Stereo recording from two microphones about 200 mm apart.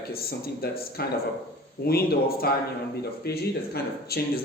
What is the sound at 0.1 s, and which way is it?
Speech, 50° left (ahead or behind).